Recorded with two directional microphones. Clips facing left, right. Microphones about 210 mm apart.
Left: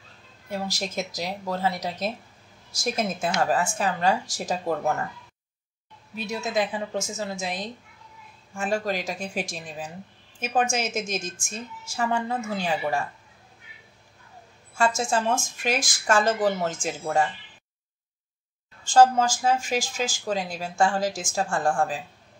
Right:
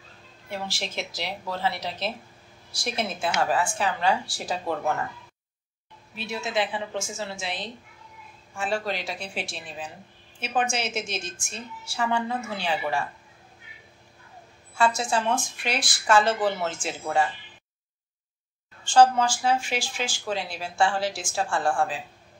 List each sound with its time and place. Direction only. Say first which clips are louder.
0.5 s a woman's voice: left 3 dB; 40° left (ahead or behind)
6.1 s a woman's voice: left 2 dB; 45° left (ahead or behind)
14.8 s a woman's voice: even; 45° left (ahead or behind)
18.9 s a woman's voice: left 1 dB; 45° left (ahead or behind)